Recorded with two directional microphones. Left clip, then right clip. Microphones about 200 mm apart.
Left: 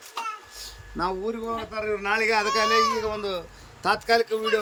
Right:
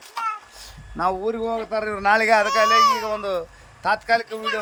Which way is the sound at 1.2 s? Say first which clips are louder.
Right 5 dB; 25° right (ahead or behind).